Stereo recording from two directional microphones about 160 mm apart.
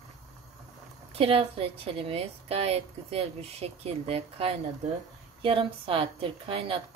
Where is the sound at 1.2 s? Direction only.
35° right (ahead or behind).